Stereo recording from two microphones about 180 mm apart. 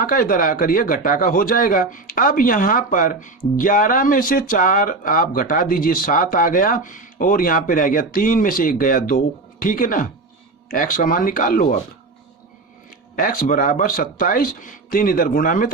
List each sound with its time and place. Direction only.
0.0 s speech: 50° left (ahead or behind)
13.1 s speech: 50° left (ahead or behind)